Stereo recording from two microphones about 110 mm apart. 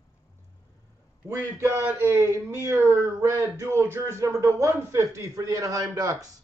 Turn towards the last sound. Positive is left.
turn(degrees=-35)  # may be behind; listen again after turning